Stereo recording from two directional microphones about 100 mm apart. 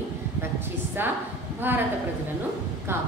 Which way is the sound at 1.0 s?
20° right (ahead or behind).